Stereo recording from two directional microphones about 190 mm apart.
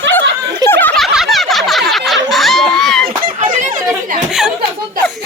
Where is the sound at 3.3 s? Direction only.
30° right (ahead or behind).